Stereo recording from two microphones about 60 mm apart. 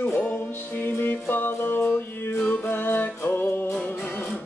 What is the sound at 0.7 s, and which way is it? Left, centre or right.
Music, left.